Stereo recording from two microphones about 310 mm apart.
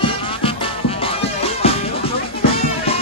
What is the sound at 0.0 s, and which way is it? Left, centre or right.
Music, centre.